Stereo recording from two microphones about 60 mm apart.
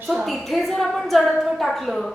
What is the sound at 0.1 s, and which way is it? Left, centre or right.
A woman's voice, centre.